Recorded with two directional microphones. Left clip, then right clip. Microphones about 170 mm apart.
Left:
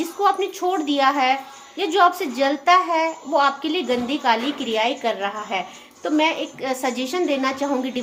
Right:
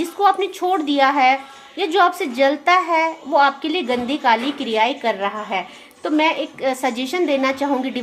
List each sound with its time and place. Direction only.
0.2 s a woman's voice: 45° right (ahead or behind)